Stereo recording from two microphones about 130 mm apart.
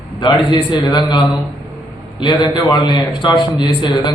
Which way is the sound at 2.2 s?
35° left (ahead or behind).